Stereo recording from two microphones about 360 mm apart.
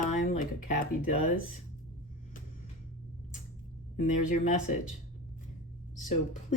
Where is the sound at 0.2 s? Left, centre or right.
Left.